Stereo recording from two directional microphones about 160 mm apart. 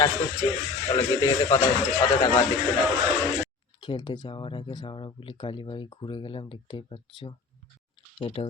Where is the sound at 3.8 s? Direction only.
30° left (ahead or behind).